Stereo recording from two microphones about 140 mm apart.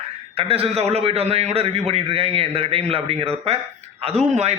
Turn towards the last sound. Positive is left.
turn(degrees=-50)  # may be behind; listen again after turning